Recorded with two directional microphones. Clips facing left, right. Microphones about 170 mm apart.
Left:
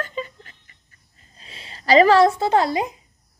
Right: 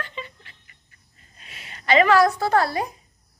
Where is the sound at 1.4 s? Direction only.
30° left (ahead or behind).